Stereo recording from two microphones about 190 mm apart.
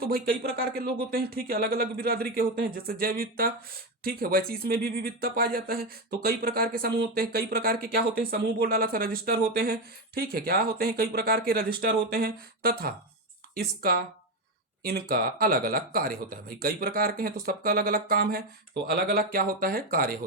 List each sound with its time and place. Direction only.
0.0 s speech: 55° right (ahead or behind)